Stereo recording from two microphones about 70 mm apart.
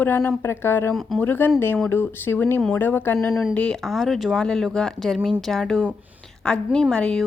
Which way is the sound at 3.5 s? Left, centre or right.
Centre.